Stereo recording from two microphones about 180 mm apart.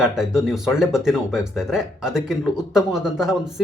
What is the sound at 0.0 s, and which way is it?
Speech, 5° right (ahead or behind).